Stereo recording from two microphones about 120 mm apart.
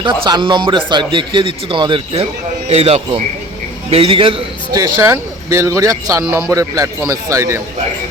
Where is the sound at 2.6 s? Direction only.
60° right (ahead or behind).